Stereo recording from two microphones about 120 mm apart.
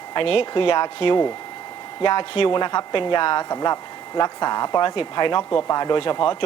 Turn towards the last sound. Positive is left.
turn(degrees=45)  # may be behind; listen again after turning